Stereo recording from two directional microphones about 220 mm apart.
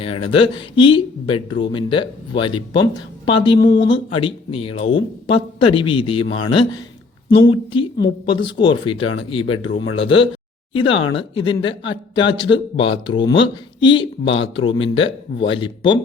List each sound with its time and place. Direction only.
0.0 s speech: 25° left (ahead or behind)
7.7 s speech: 25° left (ahead or behind)